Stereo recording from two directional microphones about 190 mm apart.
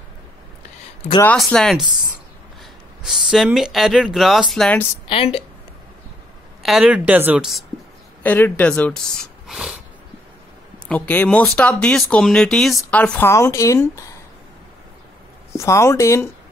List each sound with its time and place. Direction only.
1.2 s speech: 5° left (ahead or behind)
5.0 s a woman's voice: 30° left (ahead or behind)
6.6 s speech: centre (ahead or behind)
8.2 s speech: 10° left (ahead or behind)
9.5 s a sound: 5° right (ahead or behind)
10.9 s speech: 10° left (ahead or behind)
15.5 s speech: 15° left (ahead or behind)